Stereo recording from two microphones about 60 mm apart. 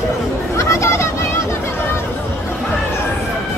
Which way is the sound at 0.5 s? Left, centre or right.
Left.